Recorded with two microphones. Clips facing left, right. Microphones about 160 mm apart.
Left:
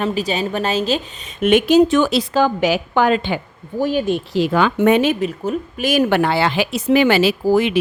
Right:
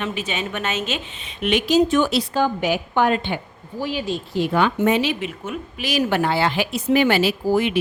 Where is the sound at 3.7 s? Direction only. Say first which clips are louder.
Left 7 dB; 50° left (ahead or behind).